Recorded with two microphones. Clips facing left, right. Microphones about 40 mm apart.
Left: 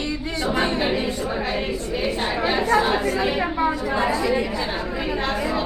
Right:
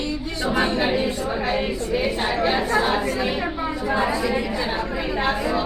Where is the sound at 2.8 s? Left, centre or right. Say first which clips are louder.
Left 1 dB; centre.